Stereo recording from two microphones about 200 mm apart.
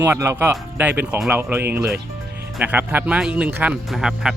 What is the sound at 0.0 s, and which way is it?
Speech, 15° right (ahead or behind).